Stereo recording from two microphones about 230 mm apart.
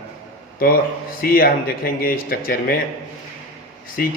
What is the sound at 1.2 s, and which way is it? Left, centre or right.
A man's voice, left.